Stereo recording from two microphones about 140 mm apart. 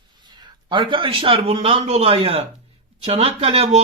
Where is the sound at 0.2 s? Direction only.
30° right (ahead or behind).